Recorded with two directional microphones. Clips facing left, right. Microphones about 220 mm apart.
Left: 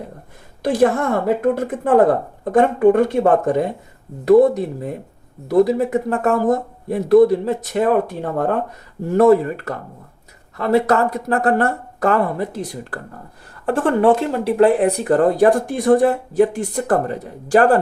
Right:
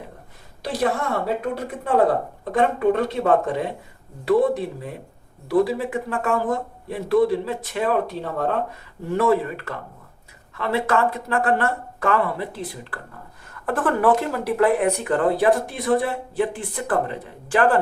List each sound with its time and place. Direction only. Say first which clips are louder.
0.6 s a woman's voice: left 7 dB; 50° left (ahead or behind)
13.5 s speech: left 5 dB; 30° left (ahead or behind)